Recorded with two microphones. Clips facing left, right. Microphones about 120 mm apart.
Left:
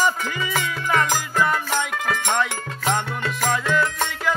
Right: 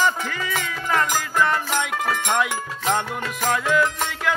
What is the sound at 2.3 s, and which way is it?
Music, 10° right (ahead or behind).